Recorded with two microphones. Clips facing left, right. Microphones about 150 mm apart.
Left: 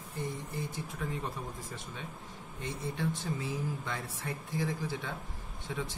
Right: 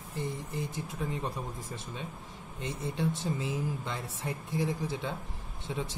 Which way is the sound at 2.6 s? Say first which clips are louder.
Right 2 dB; 20° right (ahead or behind).